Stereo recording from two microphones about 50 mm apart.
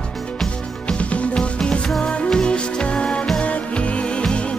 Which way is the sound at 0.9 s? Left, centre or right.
Left.